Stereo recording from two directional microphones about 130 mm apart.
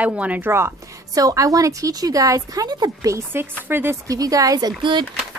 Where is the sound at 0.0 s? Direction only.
10° right (ahead or behind).